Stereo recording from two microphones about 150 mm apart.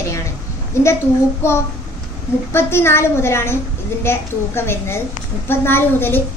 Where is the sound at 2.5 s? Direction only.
15° left (ahead or behind).